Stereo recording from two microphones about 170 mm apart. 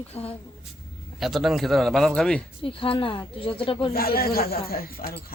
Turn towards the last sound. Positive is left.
turn(degrees=60)  # may be behind; listen again after turning